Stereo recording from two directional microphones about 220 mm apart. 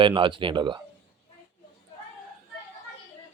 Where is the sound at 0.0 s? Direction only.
20° right (ahead or behind).